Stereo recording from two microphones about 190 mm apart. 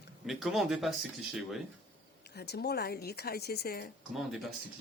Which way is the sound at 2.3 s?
60° left (ahead or behind).